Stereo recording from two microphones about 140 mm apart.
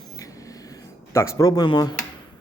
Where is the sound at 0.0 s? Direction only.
25° left (ahead or behind).